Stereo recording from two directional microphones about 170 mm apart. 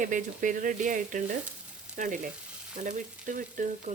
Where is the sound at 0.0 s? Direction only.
50° right (ahead or behind).